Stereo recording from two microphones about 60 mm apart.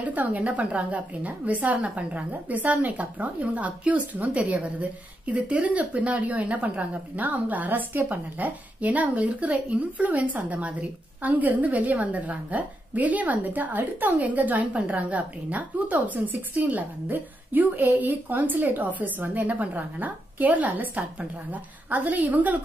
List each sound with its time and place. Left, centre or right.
0.0 s speech: right